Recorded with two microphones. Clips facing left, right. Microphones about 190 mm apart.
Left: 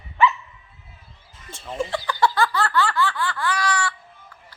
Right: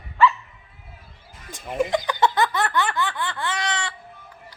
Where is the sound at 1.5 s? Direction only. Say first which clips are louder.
Right 4 dB; 15° right (ahead or behind).